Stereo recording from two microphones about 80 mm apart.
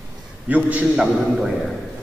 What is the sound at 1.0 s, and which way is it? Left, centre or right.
Speech, centre.